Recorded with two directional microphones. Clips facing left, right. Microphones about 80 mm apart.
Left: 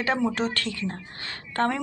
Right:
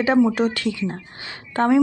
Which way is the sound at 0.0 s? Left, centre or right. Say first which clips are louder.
Right 8 dB; centre.